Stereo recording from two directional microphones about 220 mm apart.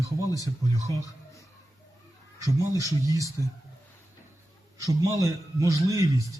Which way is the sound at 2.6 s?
15° right (ahead or behind).